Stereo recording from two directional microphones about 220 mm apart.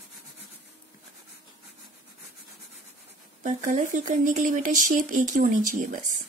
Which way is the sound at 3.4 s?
35° right (ahead or behind).